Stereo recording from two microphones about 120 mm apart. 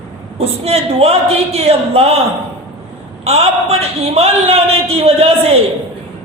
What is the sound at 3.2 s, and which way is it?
A man's voice, 55° right (ahead or behind).